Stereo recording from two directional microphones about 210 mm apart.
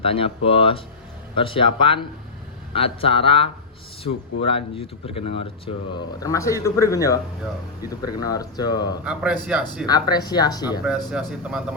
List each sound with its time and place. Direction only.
0.0 s speech: 25° left (ahead or behind)
6.1 s speech: 15° left (ahead or behind)
9.0 s speech: 5° right (ahead or behind)
9.8 s speech: 20° left (ahead or behind)
11.1 s speech: centre (ahead or behind)